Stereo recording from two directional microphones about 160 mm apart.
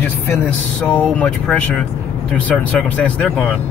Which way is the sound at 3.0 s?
5° left (ahead or behind).